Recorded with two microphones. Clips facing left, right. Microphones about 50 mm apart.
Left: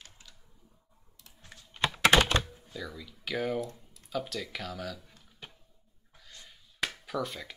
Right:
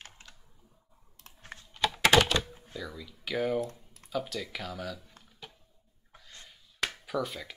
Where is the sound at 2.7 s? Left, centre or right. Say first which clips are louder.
Even; centre.